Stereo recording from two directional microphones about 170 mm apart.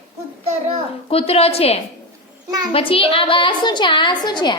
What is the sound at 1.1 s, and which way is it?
A woman's voice, 35° left (ahead or behind).